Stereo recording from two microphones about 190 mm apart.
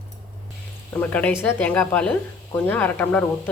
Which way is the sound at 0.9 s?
10° left (ahead or behind).